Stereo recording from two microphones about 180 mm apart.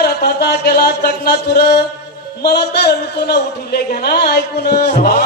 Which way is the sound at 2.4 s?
65° left (ahead or behind).